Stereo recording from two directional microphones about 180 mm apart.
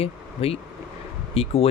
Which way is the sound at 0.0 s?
35° left (ahead or behind).